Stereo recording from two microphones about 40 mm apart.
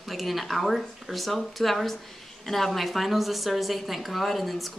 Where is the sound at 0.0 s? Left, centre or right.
Centre.